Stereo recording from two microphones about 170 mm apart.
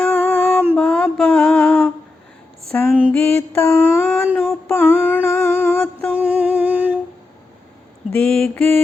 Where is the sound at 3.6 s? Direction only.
15° left (ahead or behind).